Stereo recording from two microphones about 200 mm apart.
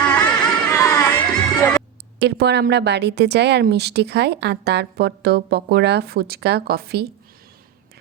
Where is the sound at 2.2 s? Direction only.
55° right (ahead or behind).